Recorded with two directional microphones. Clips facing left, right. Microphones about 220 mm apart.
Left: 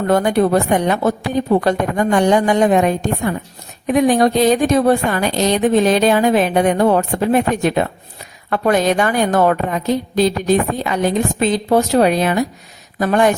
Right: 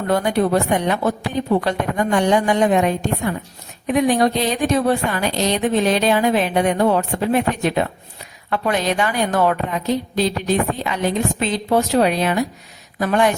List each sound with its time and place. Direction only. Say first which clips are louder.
0.1 s speech: left 3 dB; 50° left (ahead or behind)